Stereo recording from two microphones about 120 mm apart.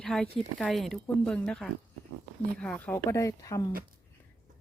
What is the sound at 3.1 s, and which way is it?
Speech, 25° left (ahead or behind).